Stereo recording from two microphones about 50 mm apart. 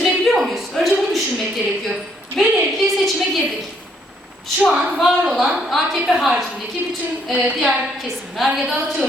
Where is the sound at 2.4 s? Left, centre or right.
Centre.